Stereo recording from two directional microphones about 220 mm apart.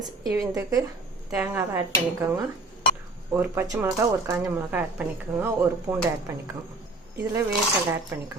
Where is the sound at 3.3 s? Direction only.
10° right (ahead or behind).